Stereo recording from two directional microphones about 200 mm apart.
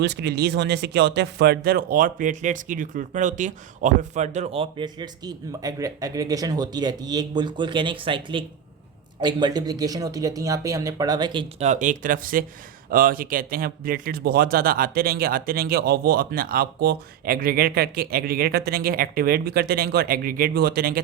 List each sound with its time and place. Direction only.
0.0 s speech: 60° right (ahead or behind); by 11.7 s 25° right (ahead or behind)
11.7 s speech: 40° right (ahead or behind)